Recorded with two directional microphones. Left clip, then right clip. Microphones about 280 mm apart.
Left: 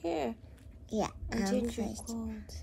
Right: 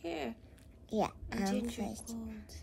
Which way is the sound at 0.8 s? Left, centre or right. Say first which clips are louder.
Even; centre.